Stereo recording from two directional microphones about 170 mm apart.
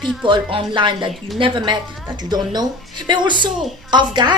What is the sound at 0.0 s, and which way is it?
Speech, centre (ahead or behind).